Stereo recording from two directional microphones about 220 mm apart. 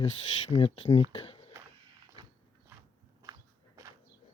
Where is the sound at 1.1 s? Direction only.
25° left (ahead or behind).